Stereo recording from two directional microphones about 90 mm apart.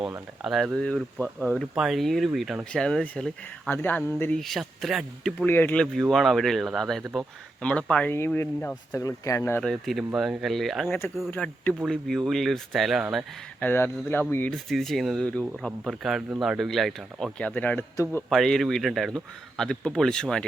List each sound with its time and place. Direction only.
0.4 s speech: centre (ahead or behind)
3.7 s speech: 25° left (ahead or behind)
4.4 s speech: centre (ahead or behind)
5.5 s speech: 25° left (ahead or behind)
5.7 s speech: 10° left (ahead or behind)
8.3 s speech: 25° left (ahead or behind)
8.9 s speech: 35° left (ahead or behind)
9.6 s speech: 5° left (ahead or behind)
10.8 s speech: 20° left (ahead or behind); by 13.2 s 5° right (ahead or behind)
13.6 s speech: 25° left (ahead or behind)
14.7 s speech: centre (ahead or behind)
17.3 s speech: 15° left (ahead or behind)
17.9 s speech: 35° left (ahead or behind)
18.3 s speech: 5° left (ahead or behind)